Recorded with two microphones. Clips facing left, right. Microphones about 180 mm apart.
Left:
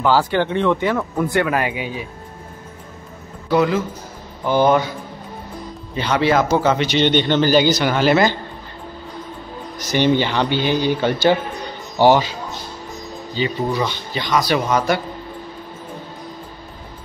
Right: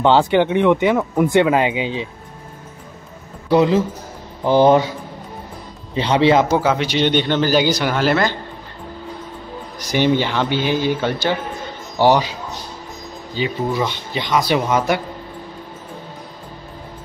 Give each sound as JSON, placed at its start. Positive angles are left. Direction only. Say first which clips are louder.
{"t": 0.0, "sound": "speech", "louder": "right 3 dB", "side_deg": -25}
{"t": 3.4, "sound": "speech", "louder": "right 3 dB", "side_deg": -30}
{"t": 5.9, "sound": "speech", "louder": "right 3 dB", "side_deg": -25}
{"t": 6.6, "sound": "a man's voice", "louder": "left 1 dB", "side_deg": -5}
{"t": 9.8, "sound": "a man's voice", "louder": "even", "side_deg": -10}
{"t": 11.5, "sound": "a sound", "louder": "even", "side_deg": 0}
{"t": 13.4, "sound": "a man's voice", "louder": "even", "side_deg": 0}
{"t": 13.8, "sound": "speech", "louder": "right 1 dB", "side_deg": -20}